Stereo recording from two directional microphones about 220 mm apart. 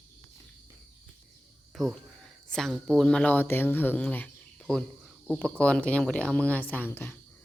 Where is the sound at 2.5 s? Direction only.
Centre (ahead or behind).